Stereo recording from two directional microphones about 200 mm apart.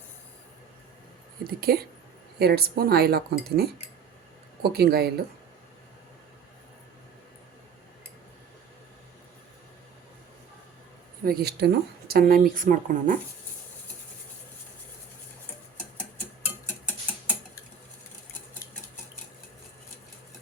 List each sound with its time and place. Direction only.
1.5 s speech: 50° right (ahead or behind)
4.7 s speech: 50° right (ahead or behind)
11.2 s speech: 50° right (ahead or behind)